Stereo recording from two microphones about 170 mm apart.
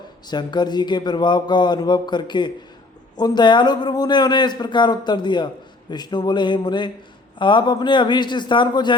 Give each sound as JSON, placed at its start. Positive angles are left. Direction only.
{"t": 0.3, "sound": "a man's voice", "side_deg": 25}